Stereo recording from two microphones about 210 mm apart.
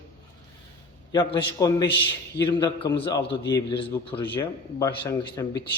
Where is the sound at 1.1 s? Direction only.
20° left (ahead or behind).